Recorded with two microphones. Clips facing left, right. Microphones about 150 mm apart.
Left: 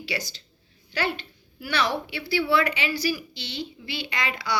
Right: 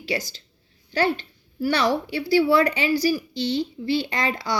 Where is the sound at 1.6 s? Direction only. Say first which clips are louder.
Right 5 dB; 45° right (ahead or behind).